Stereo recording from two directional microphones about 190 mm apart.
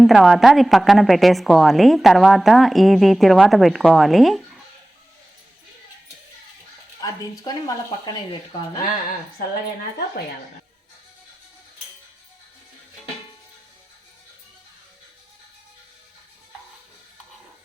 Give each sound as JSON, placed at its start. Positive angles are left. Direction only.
{"t": 0.0, "sound": "a woman's voice", "side_deg": 0}